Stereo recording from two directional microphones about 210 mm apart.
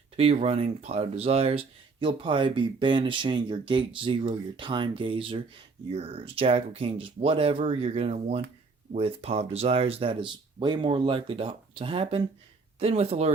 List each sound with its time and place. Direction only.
0.2 s speech: 30° right (ahead or behind)